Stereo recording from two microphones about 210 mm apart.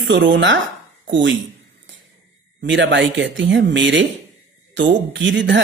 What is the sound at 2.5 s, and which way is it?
Speech, 60° right (ahead or behind).